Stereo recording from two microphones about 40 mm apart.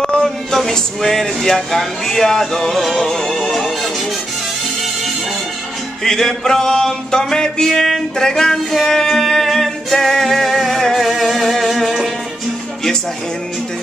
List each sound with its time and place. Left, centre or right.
0.0 s music: centre
0.6 s speech: centre
6.0 s speech: centre
8.8 s music: centre